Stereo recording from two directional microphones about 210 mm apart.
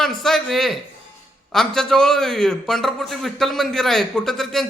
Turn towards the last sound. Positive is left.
turn(degrees=0)  # may be behind; listen again after turning